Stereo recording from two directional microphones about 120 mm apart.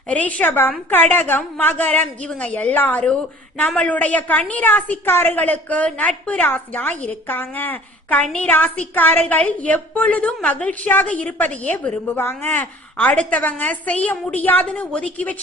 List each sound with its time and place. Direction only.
0.1 s a woman's voice: 10° left (ahead or behind)